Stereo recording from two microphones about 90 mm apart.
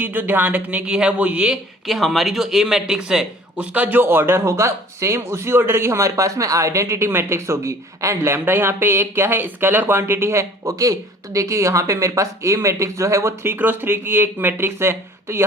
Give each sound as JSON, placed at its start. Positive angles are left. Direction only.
{"t": 0.0, "sound": "speech", "side_deg": -20}
{"t": 1.9, "sound": "a man's voice", "side_deg": 0}
{"t": 3.8, "sound": "speech", "side_deg": -20}